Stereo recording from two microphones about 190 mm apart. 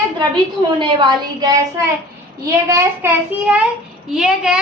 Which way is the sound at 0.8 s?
25° right (ahead or behind).